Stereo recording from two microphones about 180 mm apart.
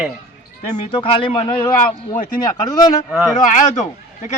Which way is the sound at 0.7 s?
30° left (ahead or behind).